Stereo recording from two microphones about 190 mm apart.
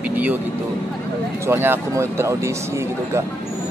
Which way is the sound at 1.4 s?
10° right (ahead or behind).